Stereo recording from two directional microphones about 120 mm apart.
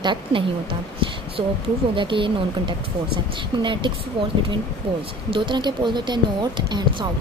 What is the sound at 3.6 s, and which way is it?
Speech, 40° right (ahead or behind).